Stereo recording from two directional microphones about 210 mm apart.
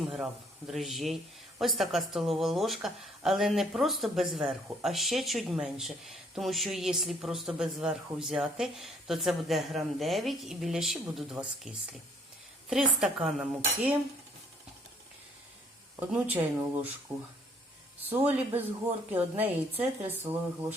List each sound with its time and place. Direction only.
0.7 s speech: centre (ahead or behind)
16.0 s speech: 5° right (ahead or behind)